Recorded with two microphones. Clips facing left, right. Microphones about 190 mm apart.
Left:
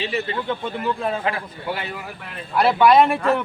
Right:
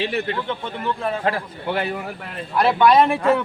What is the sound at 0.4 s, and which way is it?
Speech, 10° left (ahead or behind).